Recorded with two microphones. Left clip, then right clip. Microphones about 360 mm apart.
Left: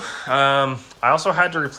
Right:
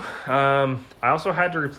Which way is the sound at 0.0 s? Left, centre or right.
Centre.